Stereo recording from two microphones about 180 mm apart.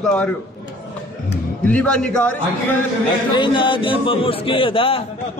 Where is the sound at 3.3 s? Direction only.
25° left (ahead or behind).